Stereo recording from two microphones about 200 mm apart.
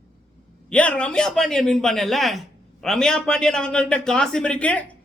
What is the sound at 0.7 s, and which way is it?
A man's voice, 5° left (ahead or behind).